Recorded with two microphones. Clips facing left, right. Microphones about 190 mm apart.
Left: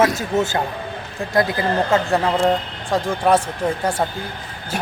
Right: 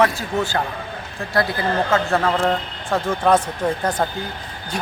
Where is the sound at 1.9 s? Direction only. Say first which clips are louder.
Left 1 dB; 15° left (ahead or behind).